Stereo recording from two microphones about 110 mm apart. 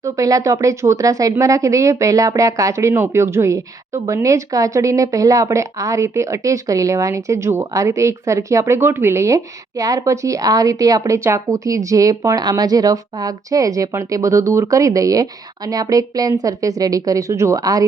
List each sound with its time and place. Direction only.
0.0 s a woman's voice: 30° right (ahead or behind)